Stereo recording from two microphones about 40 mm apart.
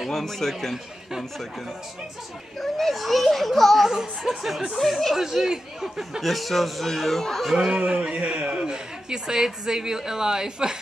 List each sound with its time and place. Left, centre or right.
0.0 s a man's voice: centre
2.6 s a child's voice: centre
3.9 s a woman's voice: centre
6.2 s a child's voice: centre
7.5 s speech: centre
7.8 s a woman's voice: right